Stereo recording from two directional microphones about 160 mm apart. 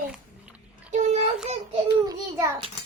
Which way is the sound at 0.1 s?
5° right (ahead or behind).